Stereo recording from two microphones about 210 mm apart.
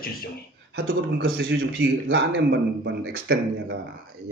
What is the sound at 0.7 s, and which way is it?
A man's voice, 45° right (ahead or behind).